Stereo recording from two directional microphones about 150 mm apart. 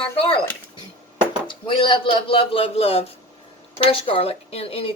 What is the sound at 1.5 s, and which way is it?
Speech, 35° left (ahead or behind).